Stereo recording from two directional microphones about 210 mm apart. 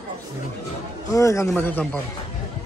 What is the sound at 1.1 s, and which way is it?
Speech, 15° left (ahead or behind).